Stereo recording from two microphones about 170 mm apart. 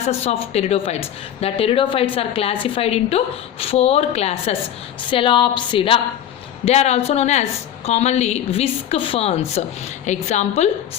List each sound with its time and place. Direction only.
0.0 s a woman's voice: 40° left (ahead or behind)